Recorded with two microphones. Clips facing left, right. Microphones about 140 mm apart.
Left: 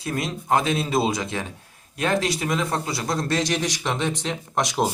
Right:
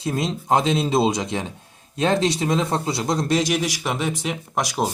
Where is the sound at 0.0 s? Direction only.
25° right (ahead or behind); by 4.9 s centre (ahead or behind).